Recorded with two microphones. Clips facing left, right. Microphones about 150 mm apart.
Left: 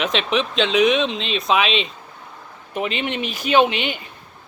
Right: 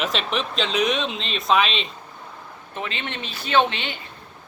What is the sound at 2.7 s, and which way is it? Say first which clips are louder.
Speech: left 7 dB; 15° left (ahead or behind).